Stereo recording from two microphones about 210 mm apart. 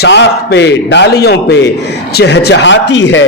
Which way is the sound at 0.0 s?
55° left (ahead or behind).